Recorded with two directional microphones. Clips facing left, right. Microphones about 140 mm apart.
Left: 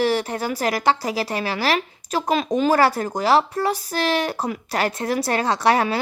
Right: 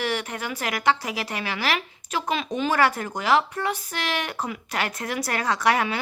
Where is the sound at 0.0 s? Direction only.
35° left (ahead or behind).